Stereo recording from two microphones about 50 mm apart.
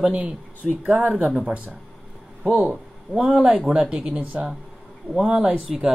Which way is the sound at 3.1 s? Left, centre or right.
Right.